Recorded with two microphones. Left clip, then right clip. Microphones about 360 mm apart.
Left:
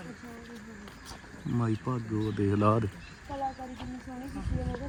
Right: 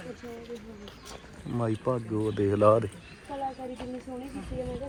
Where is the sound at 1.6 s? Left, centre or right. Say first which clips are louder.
Right 5 dB; centre.